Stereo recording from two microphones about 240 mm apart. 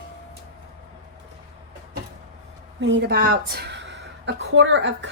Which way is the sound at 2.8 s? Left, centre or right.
Right.